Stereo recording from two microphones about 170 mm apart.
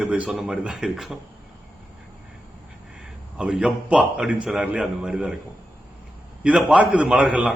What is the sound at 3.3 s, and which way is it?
A man's voice, 5° right (ahead or behind).